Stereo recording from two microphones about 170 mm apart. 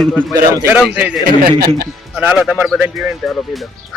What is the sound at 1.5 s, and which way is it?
Speech, 65° right (ahead or behind).